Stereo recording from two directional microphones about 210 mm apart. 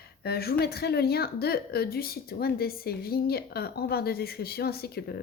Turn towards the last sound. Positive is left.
turn(degrees=50)  # may be behind; listen again after turning